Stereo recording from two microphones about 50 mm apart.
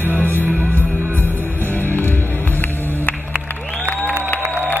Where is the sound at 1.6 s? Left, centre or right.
Left.